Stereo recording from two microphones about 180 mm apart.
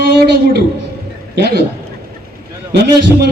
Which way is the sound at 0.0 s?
60° right (ahead or behind).